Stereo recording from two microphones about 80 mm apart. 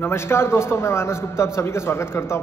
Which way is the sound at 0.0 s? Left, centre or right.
Left.